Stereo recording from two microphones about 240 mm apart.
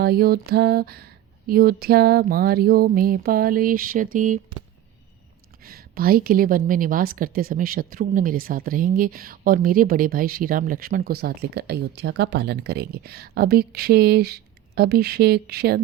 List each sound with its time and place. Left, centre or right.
0.0 s mantra: right
0.5 s a woman's voice: right
5.6 s a woman's voice: right